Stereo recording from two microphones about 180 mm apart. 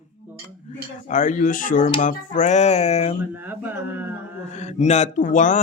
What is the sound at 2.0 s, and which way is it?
Mantra, 45° left (ahead or behind).